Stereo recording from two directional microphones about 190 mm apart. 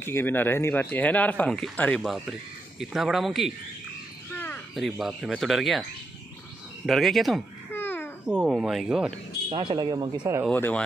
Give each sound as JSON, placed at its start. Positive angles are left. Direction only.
{"t": 0.0, "sound": "speech", "side_deg": 10}
{"t": 6.9, "sound": "speech", "side_deg": 0}
{"t": 7.7, "sound": "babbling", "side_deg": 10}
{"t": 8.3, "sound": "speech", "side_deg": -5}
{"t": 9.5, "sound": "speech", "side_deg": -25}
{"t": 10.5, "sound": "speech", "side_deg": 10}